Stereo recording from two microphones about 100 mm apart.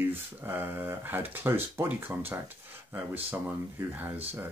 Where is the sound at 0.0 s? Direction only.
20° right (ahead or behind).